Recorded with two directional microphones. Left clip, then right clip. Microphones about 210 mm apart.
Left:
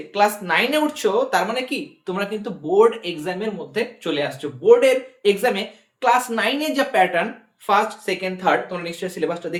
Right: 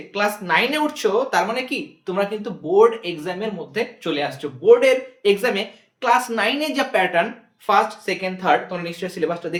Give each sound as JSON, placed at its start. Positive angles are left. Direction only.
{"t": 0.1, "sound": "speech", "side_deg": 5}